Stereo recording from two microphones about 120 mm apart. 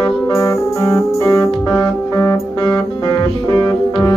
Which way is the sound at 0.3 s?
25° left (ahead or behind).